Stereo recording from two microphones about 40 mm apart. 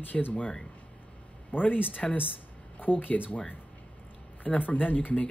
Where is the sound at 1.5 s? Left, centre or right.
Left.